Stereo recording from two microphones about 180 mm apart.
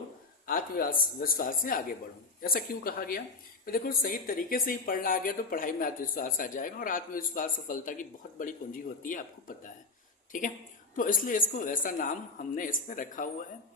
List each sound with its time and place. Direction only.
0.4 s speech: 50° left (ahead or behind)